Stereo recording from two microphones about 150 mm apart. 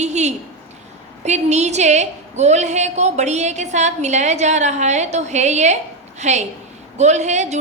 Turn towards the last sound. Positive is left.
turn(degrees=-50)  # may be behind; listen again after turning